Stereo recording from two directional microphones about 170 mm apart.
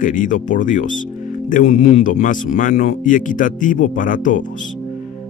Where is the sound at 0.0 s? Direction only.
50° left (ahead or behind).